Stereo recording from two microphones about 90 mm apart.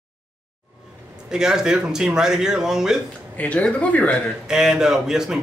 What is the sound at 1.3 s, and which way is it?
A man's voice, 5° right (ahead or behind).